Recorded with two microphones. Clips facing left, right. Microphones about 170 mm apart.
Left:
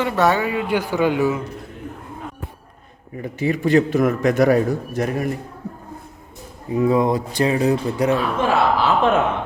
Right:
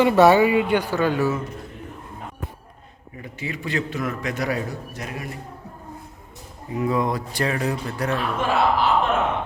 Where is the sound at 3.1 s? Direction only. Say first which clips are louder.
Left 10 dB; 40° left (ahead or behind).